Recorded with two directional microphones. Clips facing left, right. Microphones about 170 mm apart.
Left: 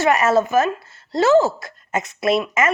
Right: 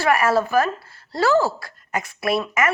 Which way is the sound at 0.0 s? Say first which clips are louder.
Left 2 dB; 20° left (ahead or behind).